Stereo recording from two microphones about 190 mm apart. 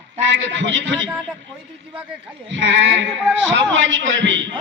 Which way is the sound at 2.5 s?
80° right.